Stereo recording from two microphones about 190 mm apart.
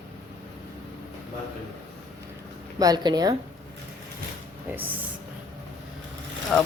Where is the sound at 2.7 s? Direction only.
20° right (ahead or behind).